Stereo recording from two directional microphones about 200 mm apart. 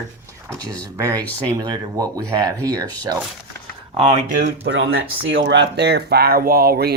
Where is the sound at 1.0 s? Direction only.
15° right (ahead or behind).